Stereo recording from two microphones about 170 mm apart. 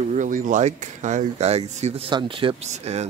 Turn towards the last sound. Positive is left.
turn(degrees=-40)  # may be behind; listen again after turning